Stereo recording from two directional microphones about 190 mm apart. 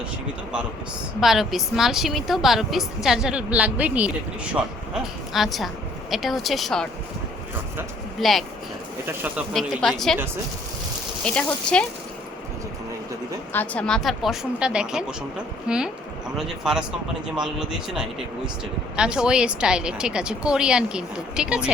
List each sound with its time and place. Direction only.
1.2 s a woman's voice: centre (ahead or behind)
5.3 s a woman's voice: centre (ahead or behind)
8.2 s a woman's voice: centre (ahead or behind)
9.5 s a woman's voice: centre (ahead or behind)
11.2 s a woman's voice: 5° left (ahead or behind)
13.5 s a woman's voice: 10° left (ahead or behind)